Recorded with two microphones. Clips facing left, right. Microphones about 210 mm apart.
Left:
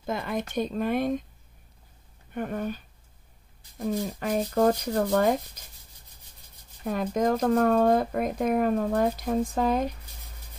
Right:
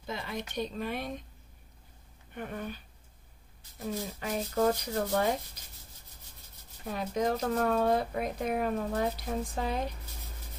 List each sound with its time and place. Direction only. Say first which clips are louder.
0.0 s speech: left 7 dB; 50° left (ahead or behind)
2.3 s speech: left 7 dB; 45° left (ahead or behind)
6.8 s speech: left 5 dB; 50° left (ahead or behind)